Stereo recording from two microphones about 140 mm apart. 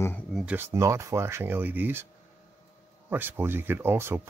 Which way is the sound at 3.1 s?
15° right (ahead or behind).